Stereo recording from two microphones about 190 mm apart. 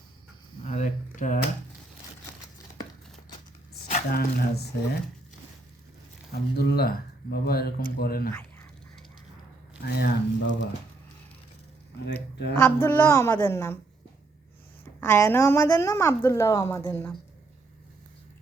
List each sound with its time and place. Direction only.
0.6 s a sound: 40° left (ahead or behind)
4.1 s speech: 55° left (ahead or behind)
6.3 s speech: 55° left (ahead or behind)
8.3 s duck: 10° left (ahead or behind)
9.8 s speech: 65° left (ahead or behind)
12.0 s speech: 60° left (ahead or behind)
12.5 s a woman's voice: 10° left (ahead or behind)
15.0 s a woman's voice: 15° left (ahead or behind)